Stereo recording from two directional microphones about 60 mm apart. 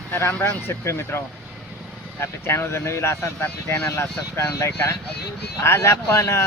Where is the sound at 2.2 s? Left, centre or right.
Left.